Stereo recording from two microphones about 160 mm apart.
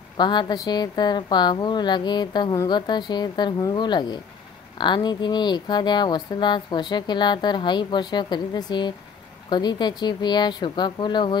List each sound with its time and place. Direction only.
0.2 s speech: 30° left (ahead or behind)